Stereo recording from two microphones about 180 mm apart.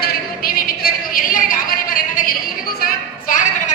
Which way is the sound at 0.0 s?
55° left (ahead or behind).